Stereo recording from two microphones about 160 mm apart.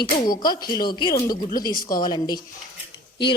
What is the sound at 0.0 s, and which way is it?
Speech, 25° left (ahead or behind).